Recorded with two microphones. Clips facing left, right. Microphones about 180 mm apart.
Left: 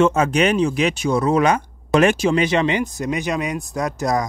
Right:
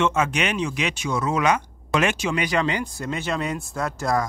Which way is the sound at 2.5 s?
20° left (ahead or behind).